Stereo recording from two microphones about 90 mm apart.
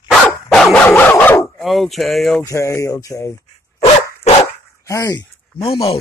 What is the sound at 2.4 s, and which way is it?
Speech, 35° left (ahead or behind).